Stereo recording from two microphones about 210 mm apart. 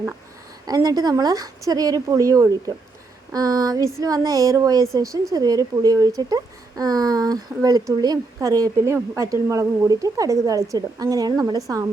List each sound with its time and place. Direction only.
0.7 s speech: 15° right (ahead or behind)